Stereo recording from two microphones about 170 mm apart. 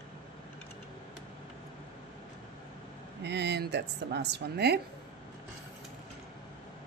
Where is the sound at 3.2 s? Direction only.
90° right; by 4.8 s 70° right (ahead or behind).